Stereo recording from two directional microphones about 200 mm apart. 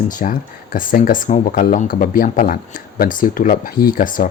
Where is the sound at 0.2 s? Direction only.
45° left (ahead or behind).